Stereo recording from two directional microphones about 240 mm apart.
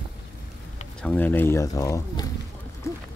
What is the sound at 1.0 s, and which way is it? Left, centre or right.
Speech, centre.